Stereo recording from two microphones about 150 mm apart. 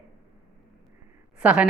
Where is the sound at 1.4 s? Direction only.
10° right (ahead or behind).